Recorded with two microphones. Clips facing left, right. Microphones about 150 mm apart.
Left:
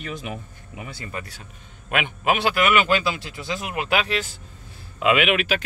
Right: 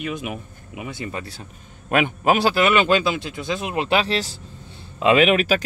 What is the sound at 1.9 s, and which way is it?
A man's voice, 40° right (ahead or behind).